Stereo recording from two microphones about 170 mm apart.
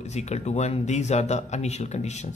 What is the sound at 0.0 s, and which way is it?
Speech, 40° left (ahead or behind).